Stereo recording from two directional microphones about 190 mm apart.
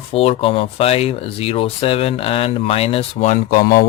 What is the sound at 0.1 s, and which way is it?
Speech, 30° left (ahead or behind).